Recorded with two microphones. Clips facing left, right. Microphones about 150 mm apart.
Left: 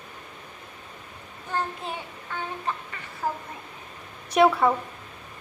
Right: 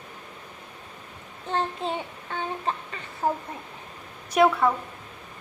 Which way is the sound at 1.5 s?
25° right (ahead or behind).